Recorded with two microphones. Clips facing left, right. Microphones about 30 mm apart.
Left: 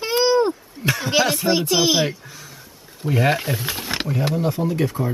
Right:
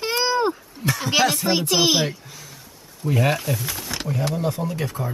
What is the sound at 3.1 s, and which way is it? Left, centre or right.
Speech, centre.